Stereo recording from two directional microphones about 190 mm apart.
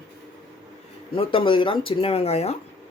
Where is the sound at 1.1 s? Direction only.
30° left (ahead or behind).